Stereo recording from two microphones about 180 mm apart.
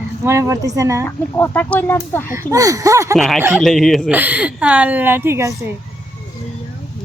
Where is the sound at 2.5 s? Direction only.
20° right (ahead or behind).